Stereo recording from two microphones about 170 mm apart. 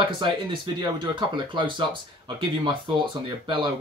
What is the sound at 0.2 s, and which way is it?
Speech, 25° right (ahead or behind).